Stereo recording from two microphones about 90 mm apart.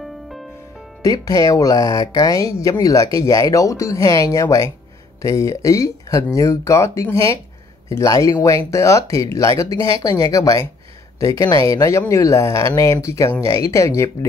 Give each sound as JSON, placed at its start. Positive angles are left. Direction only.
{"t": 1.0, "sound": "speech", "side_deg": 40}